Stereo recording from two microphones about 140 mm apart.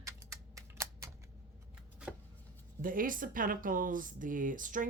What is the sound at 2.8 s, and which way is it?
A woman's voice, 80° right.